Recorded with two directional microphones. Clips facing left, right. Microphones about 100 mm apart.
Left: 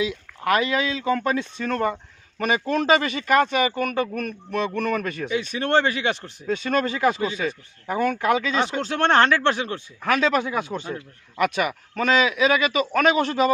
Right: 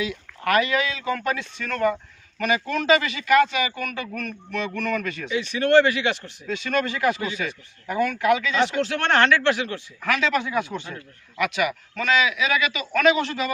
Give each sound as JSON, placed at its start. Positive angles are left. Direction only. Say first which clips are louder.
{"t": 0.0, "sound": "a man's voice", "louder": "left 2 dB", "side_deg": 25}